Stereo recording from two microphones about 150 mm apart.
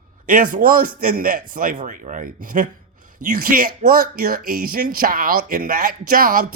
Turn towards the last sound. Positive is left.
turn(degrees=-70)  # may be behind; listen again after turning